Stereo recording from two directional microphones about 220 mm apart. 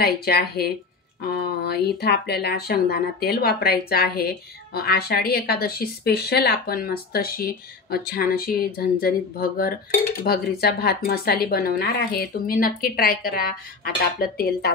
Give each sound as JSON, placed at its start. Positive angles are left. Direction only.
{"t": 0.0, "sound": "speech", "side_deg": 45}